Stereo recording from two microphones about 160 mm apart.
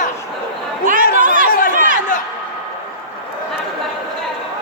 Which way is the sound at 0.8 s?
55° right (ahead or behind).